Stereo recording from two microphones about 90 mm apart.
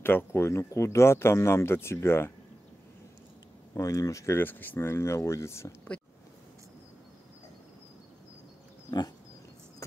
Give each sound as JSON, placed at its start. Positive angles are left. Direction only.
{"t": 0.0, "sound": "speech", "side_deg": 25}
{"t": 3.7, "sound": "speech", "side_deg": 40}
{"t": 4.4, "sound": "speech", "side_deg": 20}